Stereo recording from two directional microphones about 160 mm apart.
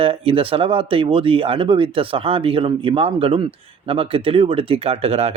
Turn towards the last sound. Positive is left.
turn(degrees=-40)  # may be behind; listen again after turning